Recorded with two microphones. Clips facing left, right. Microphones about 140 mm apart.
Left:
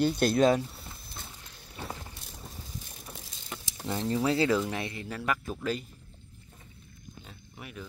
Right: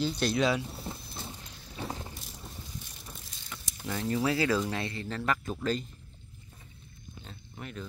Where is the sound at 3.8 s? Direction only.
25° left (ahead or behind); by 5.5 s 10° left (ahead or behind).